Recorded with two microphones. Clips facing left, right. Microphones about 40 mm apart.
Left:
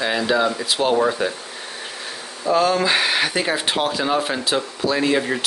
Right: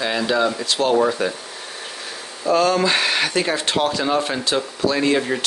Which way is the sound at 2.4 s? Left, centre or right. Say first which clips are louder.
Right 1 dB; centre.